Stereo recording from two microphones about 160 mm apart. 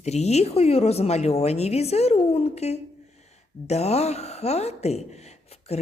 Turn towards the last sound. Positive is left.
turn(degrees=40)  # may be behind; listen again after turning